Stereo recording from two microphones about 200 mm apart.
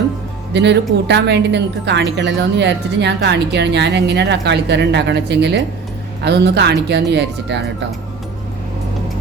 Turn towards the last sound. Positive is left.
turn(degrees=-60)  # may be behind; listen again after turning